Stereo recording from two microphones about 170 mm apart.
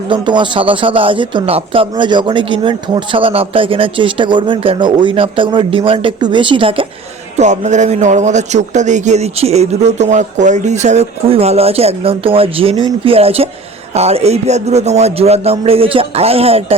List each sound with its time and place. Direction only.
0.1 s speech: 30° right (ahead or behind)
7.3 s a man's voice: 45° right (ahead or behind)